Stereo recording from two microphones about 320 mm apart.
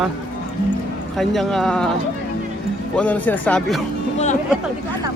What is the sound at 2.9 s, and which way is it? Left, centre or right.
Speech, centre.